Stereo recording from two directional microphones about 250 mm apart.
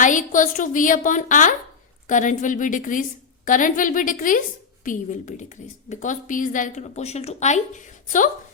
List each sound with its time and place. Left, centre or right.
0.0 s a woman's voice: left